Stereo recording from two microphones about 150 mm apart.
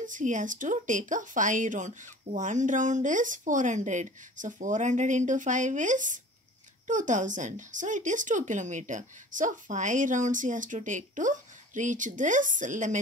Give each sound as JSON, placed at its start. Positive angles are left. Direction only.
{"t": 0.0, "sound": "speech", "side_deg": -60}